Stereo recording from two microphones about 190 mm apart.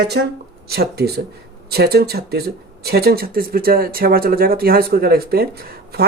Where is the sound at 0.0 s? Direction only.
60° right (ahead or behind).